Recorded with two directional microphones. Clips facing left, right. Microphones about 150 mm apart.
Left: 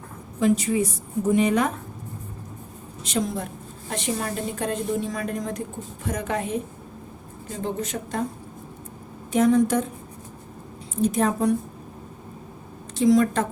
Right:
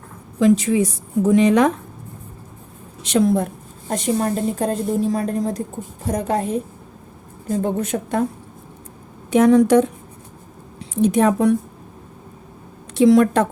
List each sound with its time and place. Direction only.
0.3 s a woman's voice: 90° right
3.0 s speech: 80° right
3.2 s a woman's voice: 50° right (ahead or behind); by 6.6 s 35° right (ahead or behind)
7.4 s a woman's voice: 55° right (ahead or behind)
9.3 s a woman's voice: 75° right (ahead or behind)
10.9 s a woman's voice: 75° right (ahead or behind)
13.0 s a woman's voice: 70° right (ahead or behind)